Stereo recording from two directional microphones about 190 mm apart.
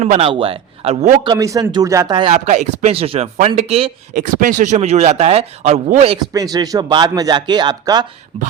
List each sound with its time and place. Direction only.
0.0 s speech: 35° right (ahead or behind)
4.1 s speech: 45° right (ahead or behind)
6.3 s speech: 20° right (ahead or behind)